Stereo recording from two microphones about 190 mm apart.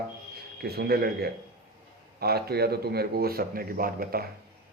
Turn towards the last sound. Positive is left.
turn(degrees=-50)  # may be behind; listen again after turning